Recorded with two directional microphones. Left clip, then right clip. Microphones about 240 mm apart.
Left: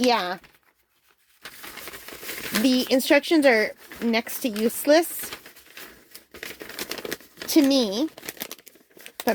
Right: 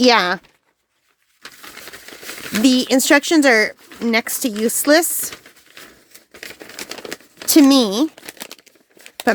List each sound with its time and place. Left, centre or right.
0.0 s speech: right
1.4 s crumpling: centre
2.6 s speech: right
5.3 s a sound: centre
7.4 s speech: right
8.1 s crumpling: centre